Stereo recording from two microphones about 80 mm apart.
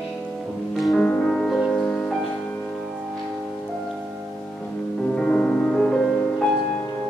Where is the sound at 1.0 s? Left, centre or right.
Centre.